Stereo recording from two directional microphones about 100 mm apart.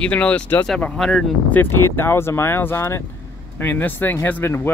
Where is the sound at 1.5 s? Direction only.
20° left (ahead or behind).